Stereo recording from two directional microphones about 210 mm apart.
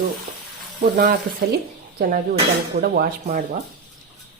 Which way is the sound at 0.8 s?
45° right (ahead or behind).